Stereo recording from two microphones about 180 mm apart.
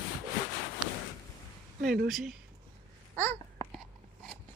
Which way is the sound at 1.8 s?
50° right (ahead or behind).